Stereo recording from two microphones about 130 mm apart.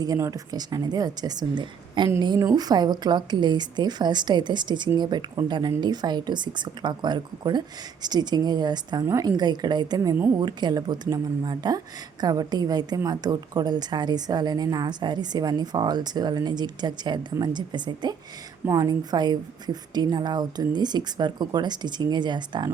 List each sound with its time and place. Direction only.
0.0 s a woman's voice: 25° right (ahead or behind)